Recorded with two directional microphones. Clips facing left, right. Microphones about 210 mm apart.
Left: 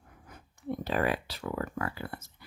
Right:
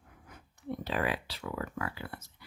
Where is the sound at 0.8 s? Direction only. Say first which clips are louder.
Left 3 dB; 45° left (ahead or behind).